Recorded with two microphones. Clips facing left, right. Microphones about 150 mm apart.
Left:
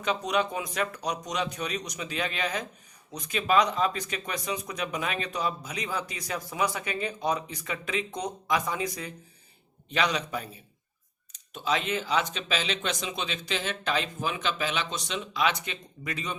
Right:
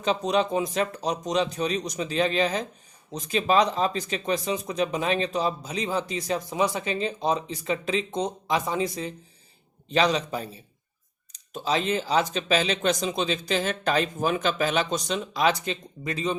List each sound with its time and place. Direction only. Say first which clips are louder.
0.0 s speech: right 4 dB; 30° right (ahead or behind)